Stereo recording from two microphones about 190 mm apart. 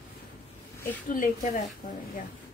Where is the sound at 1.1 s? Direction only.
45° left (ahead or behind).